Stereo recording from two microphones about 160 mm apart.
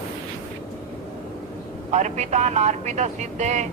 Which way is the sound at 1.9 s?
45° right (ahead or behind).